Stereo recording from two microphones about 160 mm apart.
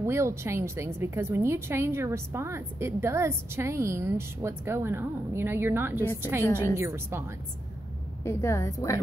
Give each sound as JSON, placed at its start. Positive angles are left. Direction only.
{"t": 0.0, "sound": "a woman's voice", "side_deg": -15}
{"t": 8.2, "sound": "a woman's voice", "side_deg": 15}